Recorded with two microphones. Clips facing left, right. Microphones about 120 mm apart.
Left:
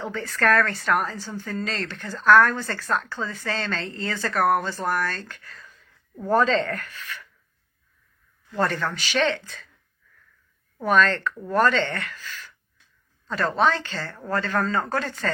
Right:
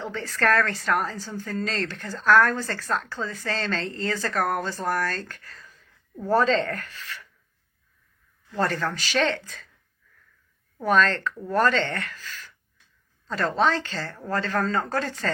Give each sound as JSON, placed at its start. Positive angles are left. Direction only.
{"t": 0.0, "sound": "a woman's voice", "side_deg": -30}
{"t": 8.6, "sound": "a woman's voice", "side_deg": -35}
{"t": 10.8, "sound": "a woman's voice", "side_deg": -35}
{"t": 13.6, "sound": "a woman's voice", "side_deg": -35}